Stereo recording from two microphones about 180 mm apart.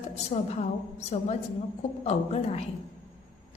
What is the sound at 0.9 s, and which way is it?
A woman's voice, 35° left (ahead or behind).